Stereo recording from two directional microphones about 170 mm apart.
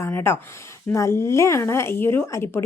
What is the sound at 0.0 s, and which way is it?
A woman's voice, 15° left (ahead or behind).